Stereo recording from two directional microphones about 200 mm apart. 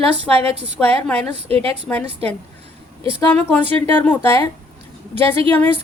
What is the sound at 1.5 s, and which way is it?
Speech, 30° right (ahead or behind).